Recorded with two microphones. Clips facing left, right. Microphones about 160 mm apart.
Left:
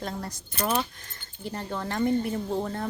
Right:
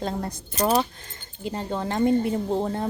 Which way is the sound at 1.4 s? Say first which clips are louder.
Right 4 dB; 20° right (ahead or behind).